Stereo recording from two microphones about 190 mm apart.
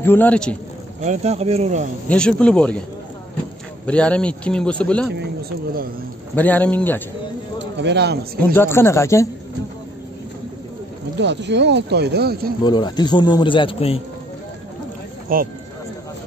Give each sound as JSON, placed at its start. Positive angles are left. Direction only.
{"t": 0.0, "sound": "speech", "side_deg": 10}
{"t": 1.0, "sound": "speech", "side_deg": -35}
{"t": 2.0, "sound": "a man's voice", "side_deg": 5}
{"t": 3.8, "sound": "a man's voice", "side_deg": 5}
{"t": 6.3, "sound": "speech", "side_deg": 10}
{"t": 7.5, "sound": "speech", "side_deg": -65}
{"t": 8.5, "sound": "speech", "side_deg": 10}
{"t": 11.1, "sound": "speech", "side_deg": -65}
{"t": 12.6, "sound": "speech", "side_deg": 20}
{"t": 15.3, "sound": "speech", "side_deg": -50}